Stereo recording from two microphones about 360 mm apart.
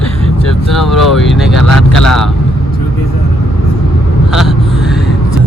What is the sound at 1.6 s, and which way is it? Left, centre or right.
Vehicle, left.